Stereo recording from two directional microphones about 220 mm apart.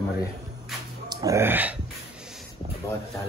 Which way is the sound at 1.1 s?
15° right (ahead or behind).